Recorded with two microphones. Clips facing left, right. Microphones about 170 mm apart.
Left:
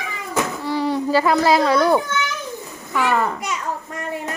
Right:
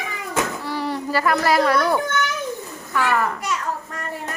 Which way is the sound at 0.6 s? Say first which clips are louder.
Left 5 dB; 15° left (ahead or behind).